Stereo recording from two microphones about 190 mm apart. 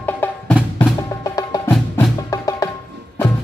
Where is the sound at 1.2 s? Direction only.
20° left (ahead or behind).